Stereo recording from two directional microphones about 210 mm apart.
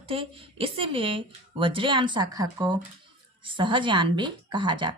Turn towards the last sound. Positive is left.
turn(degrees=-20)  # may be behind; listen again after turning